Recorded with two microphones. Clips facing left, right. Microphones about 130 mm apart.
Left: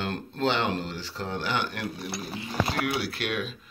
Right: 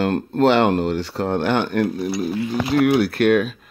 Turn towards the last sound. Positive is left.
turn(degrees=-55)  # may be behind; listen again after turning